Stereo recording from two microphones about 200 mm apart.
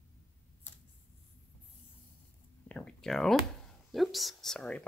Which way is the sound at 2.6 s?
5° left (ahead or behind).